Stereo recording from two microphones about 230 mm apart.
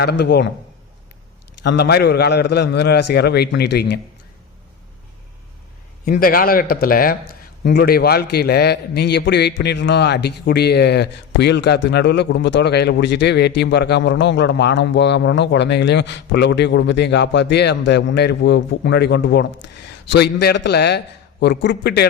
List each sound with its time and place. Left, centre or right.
0.0 s a man's voice: left
1.6 s a man's voice: left
6.1 s a man's voice: left